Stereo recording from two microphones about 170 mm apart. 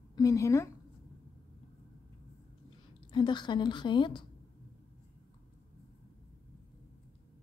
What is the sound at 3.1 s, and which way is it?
A woman's voice, 30° left (ahead or behind).